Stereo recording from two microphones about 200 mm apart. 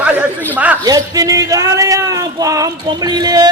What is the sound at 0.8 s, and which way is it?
Speech, 20° right (ahead or behind).